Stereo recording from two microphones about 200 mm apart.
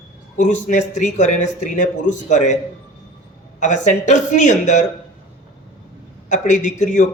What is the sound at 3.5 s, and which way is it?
A man's voice, 35° left (ahead or behind).